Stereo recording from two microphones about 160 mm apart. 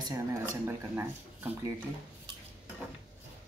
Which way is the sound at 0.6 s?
15° right (ahead or behind).